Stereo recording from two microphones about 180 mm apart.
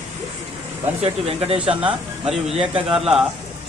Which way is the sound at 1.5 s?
30° right (ahead or behind).